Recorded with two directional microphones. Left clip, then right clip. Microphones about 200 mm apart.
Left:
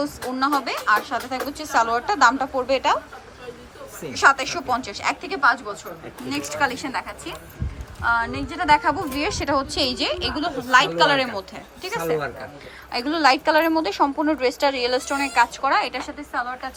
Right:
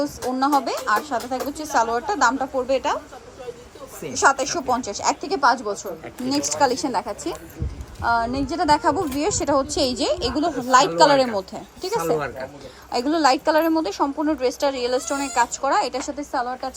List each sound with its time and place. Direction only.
0.3 s a woman's voice: 25° right (ahead or behind)
4.1 s a woman's voice: 20° right (ahead or behind)
12.1 s a woman's voice: centre (ahead or behind)
12.9 s a woman's voice: 25° right (ahead or behind)